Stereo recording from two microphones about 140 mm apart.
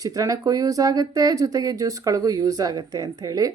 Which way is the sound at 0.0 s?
25° right (ahead or behind).